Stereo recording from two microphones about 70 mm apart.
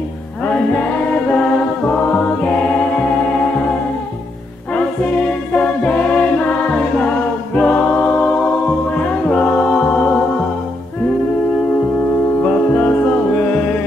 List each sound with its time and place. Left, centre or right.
1.3 s music: centre
4.7 s music: centre
7.5 s choir: centre
8.9 s music: centre
12.4 s music: centre